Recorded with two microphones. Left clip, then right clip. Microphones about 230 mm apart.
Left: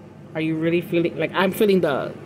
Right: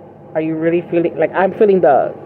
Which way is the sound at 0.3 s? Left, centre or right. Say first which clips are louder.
Right 6 dB; left.